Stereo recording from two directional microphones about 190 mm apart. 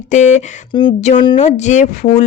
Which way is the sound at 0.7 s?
25° left (ahead or behind).